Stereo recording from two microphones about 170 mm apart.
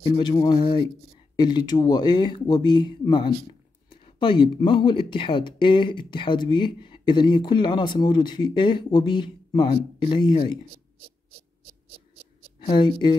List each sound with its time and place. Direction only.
0.0 s speech: 30° left (ahead or behind)
12.5 s a woman's voice: 30° left (ahead or behind)